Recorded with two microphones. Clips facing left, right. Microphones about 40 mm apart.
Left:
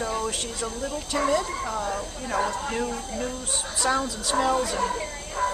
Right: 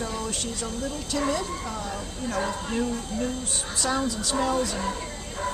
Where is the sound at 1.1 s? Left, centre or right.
Left.